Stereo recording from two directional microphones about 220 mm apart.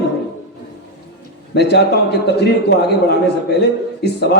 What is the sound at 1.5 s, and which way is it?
A man's voice, 50° left (ahead or behind).